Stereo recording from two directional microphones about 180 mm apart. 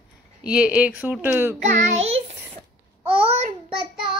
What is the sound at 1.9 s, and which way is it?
Child singing, 35° right (ahead or behind).